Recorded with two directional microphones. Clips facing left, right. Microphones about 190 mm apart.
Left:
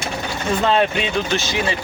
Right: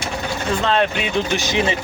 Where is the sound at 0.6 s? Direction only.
5° left (ahead or behind).